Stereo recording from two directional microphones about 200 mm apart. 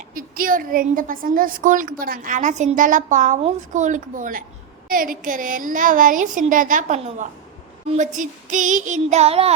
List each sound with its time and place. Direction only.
0.1 s a woman's voice: 45° right (ahead or behind)